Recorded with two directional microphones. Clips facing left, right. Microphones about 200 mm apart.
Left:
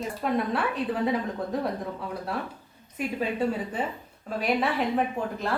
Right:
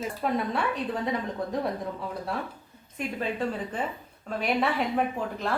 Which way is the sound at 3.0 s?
5° left (ahead or behind).